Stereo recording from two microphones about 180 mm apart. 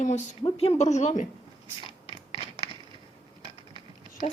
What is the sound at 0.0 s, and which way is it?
A woman's voice, 40° left (ahead or behind).